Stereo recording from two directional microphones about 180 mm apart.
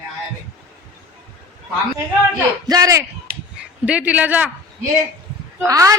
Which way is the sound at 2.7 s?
20° right (ahead or behind).